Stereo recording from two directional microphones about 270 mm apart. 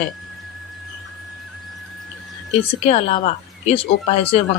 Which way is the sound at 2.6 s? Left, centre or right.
Left.